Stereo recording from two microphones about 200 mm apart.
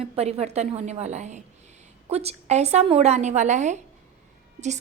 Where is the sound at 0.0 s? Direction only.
30° right (ahead or behind).